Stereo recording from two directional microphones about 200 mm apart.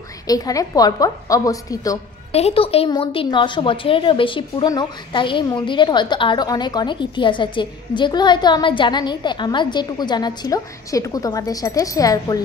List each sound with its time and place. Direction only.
0.3 s a woman's voice: 20° left (ahead or behind)
2.3 s a woman's voice: 30° left (ahead or behind)